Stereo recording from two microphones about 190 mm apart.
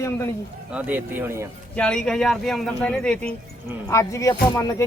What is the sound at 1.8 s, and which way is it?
Speech, 5° left (ahead or behind).